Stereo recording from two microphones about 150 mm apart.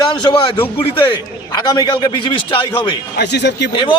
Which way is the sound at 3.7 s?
30° left (ahead or behind).